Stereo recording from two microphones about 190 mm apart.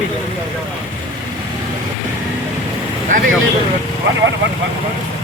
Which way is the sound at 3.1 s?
45° right (ahead or behind).